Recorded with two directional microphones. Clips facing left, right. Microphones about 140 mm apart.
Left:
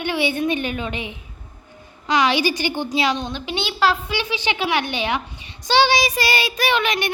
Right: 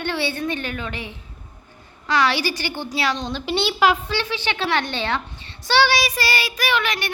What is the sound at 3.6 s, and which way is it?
Speech, 15° right (ahead or behind).